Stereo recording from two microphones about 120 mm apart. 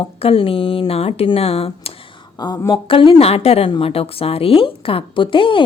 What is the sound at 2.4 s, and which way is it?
A woman's voice, 35° left (ahead or behind).